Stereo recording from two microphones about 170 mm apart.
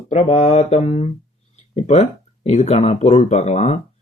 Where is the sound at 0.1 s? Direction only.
40° left (ahead or behind).